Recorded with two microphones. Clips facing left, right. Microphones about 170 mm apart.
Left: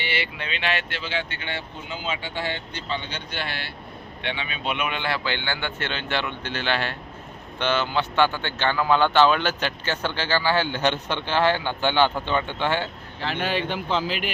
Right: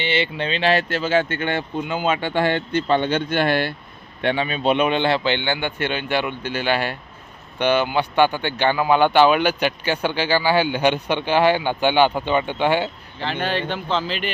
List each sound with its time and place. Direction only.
0.0 s a man's voice: 25° right (ahead or behind)
13.1 s speech: 5° left (ahead or behind)